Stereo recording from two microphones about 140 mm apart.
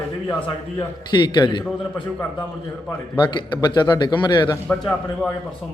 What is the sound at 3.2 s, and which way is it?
A man's voice, 35° left (ahead or behind).